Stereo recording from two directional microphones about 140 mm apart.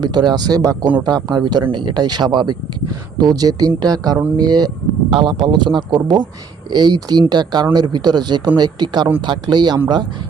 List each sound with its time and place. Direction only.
0.0 s a man's voice: 30° right (ahead or behind)